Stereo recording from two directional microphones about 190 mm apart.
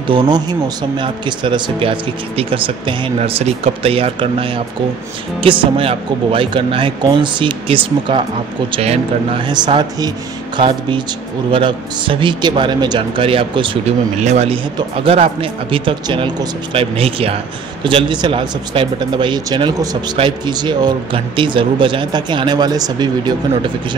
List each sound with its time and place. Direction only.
0.0 s speech: 25° right (ahead or behind)